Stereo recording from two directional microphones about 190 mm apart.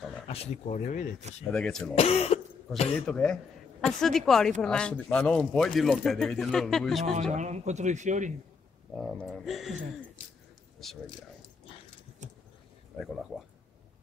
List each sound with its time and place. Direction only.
0.3 s speech: 35° left (ahead or behind)
1.5 s speech: 5° left (ahead or behind)
2.0 s speech: 35° left (ahead or behind)
3.1 s speech: 5° left (ahead or behind)
7.3 s speech: 40° right (ahead or behind)
8.9 s speech: centre (ahead or behind)
13.0 s speech: centre (ahead or behind)